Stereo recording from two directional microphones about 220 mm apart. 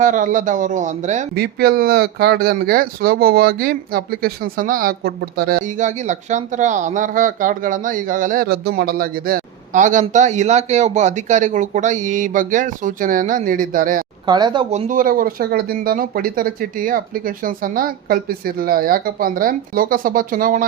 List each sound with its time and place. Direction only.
0.0 s speech: 35° right (ahead or behind)
1.4 s speech: 45° right (ahead or behind)
14.3 s speech: 20° right (ahead or behind); by 20.7 s 40° right (ahead or behind)